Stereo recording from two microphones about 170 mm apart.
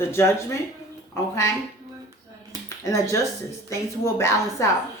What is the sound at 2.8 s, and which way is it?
Speech, 15° left (ahead or behind).